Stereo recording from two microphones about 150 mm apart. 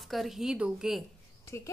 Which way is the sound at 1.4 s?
20° left (ahead or behind).